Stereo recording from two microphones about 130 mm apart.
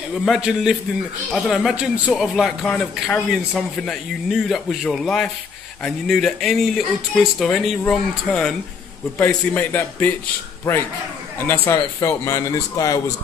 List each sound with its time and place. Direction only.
0.1 s a man's voice: centre (ahead or behind)
2.6 s a man's voice: 10° left (ahead or behind)
11.3 s speech: 20° left (ahead or behind)